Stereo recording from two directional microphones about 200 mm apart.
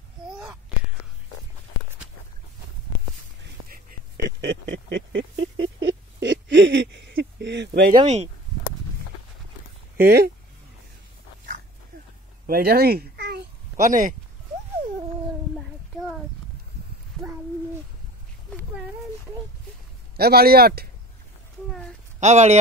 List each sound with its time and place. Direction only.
3.6 s whispering: 45° right (ahead or behind)
4.4 s a sound: 65° right (ahead or behind)
5.8 s owl: 65° right (ahead or behind)
8.0 s speech: 30° right (ahead or behind)
9.9 s speech: 50° right (ahead or behind)
12.4 s a child's voice: 50° right (ahead or behind)
13.7 s speech: 40° right (ahead or behind)
15.5 s child singing: centre (ahead or behind)
20.2 s speech: 50° right (ahead or behind)
22.2 s speech: 35° right (ahead or behind)